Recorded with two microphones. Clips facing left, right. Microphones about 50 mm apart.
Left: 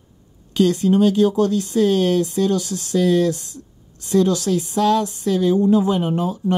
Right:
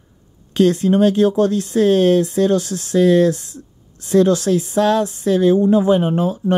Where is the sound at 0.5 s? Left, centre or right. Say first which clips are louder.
Right 2 dB; right.